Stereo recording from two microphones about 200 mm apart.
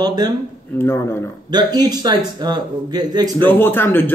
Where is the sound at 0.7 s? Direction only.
10° left (ahead or behind).